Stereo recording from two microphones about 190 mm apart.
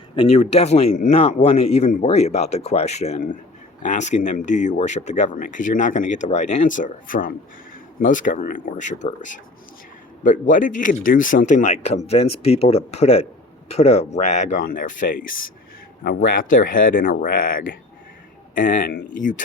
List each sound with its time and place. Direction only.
0.2 s speech: 35° left (ahead or behind)
10.5 s speech: 45° left (ahead or behind)